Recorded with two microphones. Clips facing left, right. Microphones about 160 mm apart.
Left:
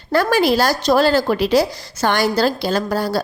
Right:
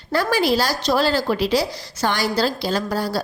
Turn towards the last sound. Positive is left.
turn(degrees=55)  # may be behind; listen again after turning